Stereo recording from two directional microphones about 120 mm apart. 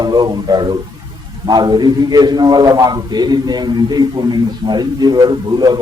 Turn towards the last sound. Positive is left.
turn(degrees=-35)  # may be behind; listen again after turning